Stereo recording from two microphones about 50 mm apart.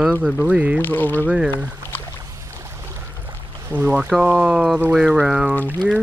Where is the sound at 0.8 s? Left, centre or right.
Left.